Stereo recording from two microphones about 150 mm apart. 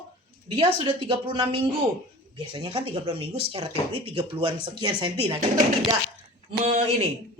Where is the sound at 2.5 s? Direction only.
35° right (ahead or behind).